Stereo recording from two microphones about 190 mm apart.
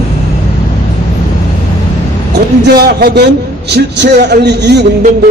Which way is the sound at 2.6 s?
60° right (ahead or behind).